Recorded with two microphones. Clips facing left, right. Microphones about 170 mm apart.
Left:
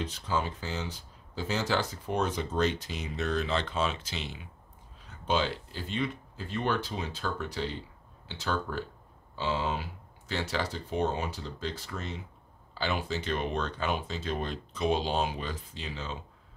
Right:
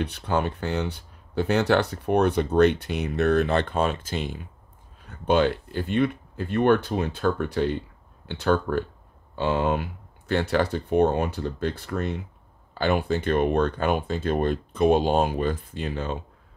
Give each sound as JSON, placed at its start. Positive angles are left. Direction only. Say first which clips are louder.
{"t": 0.0, "sound": "speech", "louder": "right 6 dB", "side_deg": -65}